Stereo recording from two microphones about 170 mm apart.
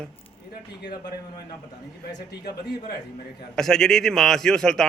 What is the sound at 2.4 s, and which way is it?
Speech, 70° left (ahead or behind).